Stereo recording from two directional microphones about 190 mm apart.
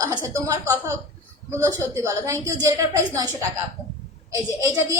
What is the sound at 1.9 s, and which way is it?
A woman's voice, 15° right (ahead or behind).